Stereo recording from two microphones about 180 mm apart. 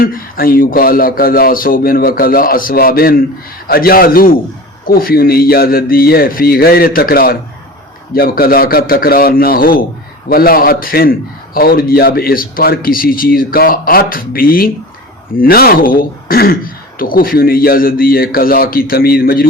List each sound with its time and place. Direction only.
0.0 s a man's voice: 50° left (ahead or behind)